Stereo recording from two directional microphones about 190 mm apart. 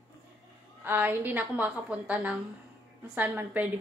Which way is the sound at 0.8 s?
10° right (ahead or behind).